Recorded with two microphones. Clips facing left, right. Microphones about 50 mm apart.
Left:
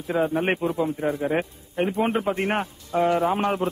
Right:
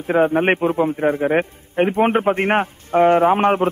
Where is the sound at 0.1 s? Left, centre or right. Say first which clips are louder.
Right 7 dB; right.